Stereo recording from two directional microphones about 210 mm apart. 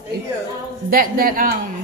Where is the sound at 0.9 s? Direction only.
45° right (ahead or behind).